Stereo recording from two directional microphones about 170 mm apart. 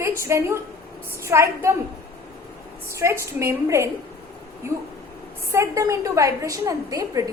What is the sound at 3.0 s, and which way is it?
Speech, 15° right (ahead or behind).